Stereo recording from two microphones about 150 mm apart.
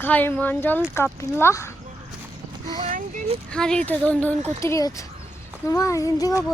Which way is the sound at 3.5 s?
5° left (ahead or behind).